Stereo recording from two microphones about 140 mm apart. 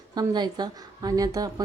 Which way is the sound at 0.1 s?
30° right (ahead or behind).